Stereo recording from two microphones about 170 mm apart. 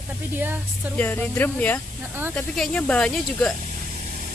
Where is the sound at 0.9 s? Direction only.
10° left (ahead or behind).